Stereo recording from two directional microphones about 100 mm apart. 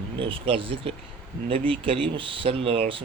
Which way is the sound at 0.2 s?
60° right (ahead or behind).